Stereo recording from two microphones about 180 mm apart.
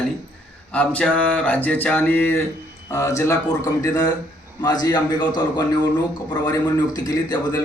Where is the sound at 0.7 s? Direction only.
5° left (ahead or behind).